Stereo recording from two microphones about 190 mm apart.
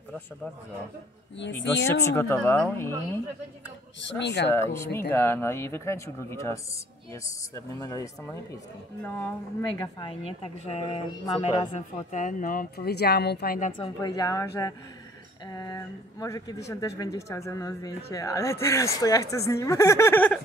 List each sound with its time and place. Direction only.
1.9 s a woman's voice: 15° left (ahead or behind)
4.0 s speech: 65° left (ahead or behind)
4.5 s a woman's voice: 15° left (ahead or behind); by 13.7 s 50° left (ahead or behind)
13.7 s a woman's voice: 25° left (ahead or behind)